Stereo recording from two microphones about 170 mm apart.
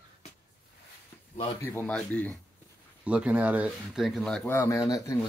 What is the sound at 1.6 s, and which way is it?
Speech, 10° left (ahead or behind).